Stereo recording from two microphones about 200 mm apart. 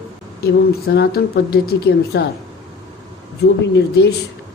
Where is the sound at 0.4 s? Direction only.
55° left (ahead or behind).